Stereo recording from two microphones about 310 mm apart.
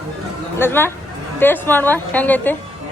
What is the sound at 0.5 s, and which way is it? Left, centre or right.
A woman's voice, centre.